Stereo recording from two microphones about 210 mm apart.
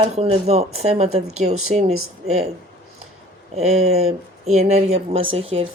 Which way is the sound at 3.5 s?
30° right (ahead or behind).